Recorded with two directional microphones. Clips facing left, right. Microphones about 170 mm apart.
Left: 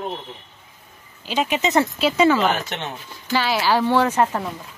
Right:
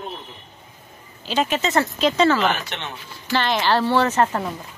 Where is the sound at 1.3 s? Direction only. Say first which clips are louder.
Even; 15° left (ahead or behind).